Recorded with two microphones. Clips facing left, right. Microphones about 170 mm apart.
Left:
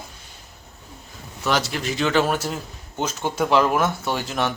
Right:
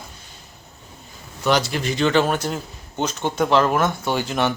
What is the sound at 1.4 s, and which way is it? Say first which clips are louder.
A man's voice: right 3 dB; centre (ahead or behind).